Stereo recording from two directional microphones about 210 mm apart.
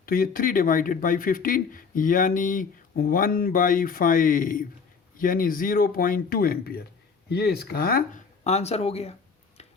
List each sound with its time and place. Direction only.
0.0 s speech: 45° left (ahead or behind)
8.4 s speech: 30° left (ahead or behind)